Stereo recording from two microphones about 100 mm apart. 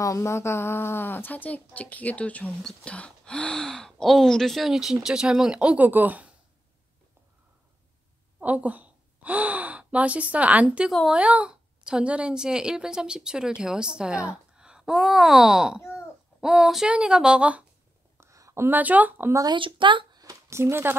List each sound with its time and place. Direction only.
0.0 s a woman's voice: 30° left (ahead or behind); by 6.3 s 15° right (ahead or behind)
8.4 s a woman's voice: 15° right (ahead or behind)
18.2 s speech: 30° right (ahead or behind)
19.5 s speech: 55° right (ahead or behind); by 20.9 s 25° right (ahead or behind)